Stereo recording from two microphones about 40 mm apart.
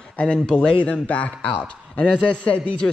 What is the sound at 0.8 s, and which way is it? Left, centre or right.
A man's voice, left.